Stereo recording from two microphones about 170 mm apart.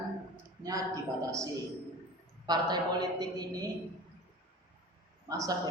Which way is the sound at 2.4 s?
25° right (ahead or behind).